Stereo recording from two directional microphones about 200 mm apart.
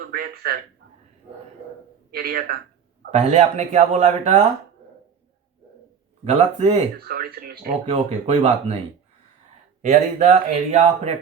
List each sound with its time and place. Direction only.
0.1 s speech: 50° right (ahead or behind)
2.0 s speech: 50° right (ahead or behind)
3.1 s speech: 35° right (ahead or behind)
6.2 s speech: 30° right (ahead or behind)
7.0 s speech: 50° right (ahead or behind)
7.9 s speech: 30° right (ahead or behind)
9.8 s speech: 35° right (ahead or behind)